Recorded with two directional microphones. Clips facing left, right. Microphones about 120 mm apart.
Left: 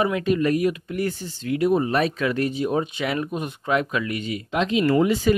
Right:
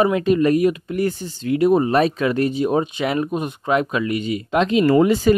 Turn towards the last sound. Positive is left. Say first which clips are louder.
# right 4 dB
turn(degrees=-40)  # may be behind; listen again after turning